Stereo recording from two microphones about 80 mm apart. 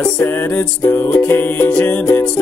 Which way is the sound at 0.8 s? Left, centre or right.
Left.